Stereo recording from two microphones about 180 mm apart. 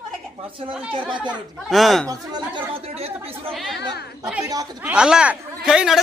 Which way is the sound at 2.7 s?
35° right (ahead or behind).